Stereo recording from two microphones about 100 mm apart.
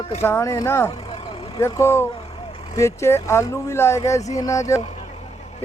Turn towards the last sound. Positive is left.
turn(degrees=30)  # may be behind; listen again after turning